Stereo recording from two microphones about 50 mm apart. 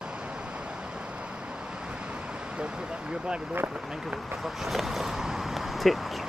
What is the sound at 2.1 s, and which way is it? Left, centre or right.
Vehicle, centre.